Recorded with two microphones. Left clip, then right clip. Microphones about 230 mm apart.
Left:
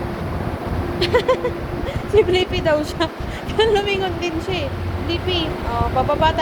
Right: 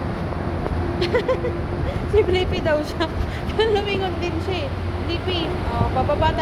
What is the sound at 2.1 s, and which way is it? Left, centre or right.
Speech, centre.